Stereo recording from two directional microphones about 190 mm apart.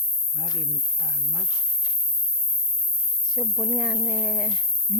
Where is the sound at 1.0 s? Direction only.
Centre (ahead or behind).